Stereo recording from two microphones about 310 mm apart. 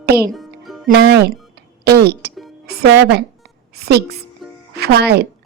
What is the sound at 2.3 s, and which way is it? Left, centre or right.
Music, centre.